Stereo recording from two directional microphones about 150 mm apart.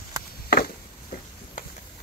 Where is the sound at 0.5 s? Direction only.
80° left.